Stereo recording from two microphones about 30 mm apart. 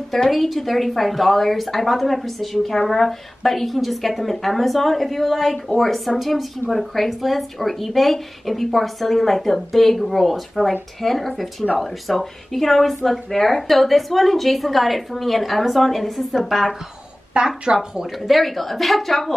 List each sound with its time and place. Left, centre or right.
0.3 s speech: centre
17.3 s speech: right
18.2 s speech: centre